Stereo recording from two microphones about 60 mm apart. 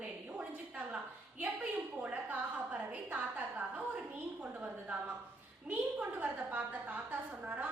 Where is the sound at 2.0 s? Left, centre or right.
Right.